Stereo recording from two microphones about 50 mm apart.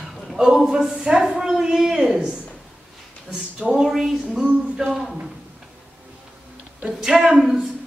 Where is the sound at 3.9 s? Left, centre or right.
Centre.